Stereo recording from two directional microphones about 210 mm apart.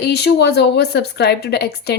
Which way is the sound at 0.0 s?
50° left (ahead or behind).